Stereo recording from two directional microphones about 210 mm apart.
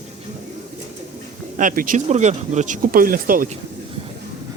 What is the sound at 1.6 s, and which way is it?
Speech, 40° right (ahead or behind).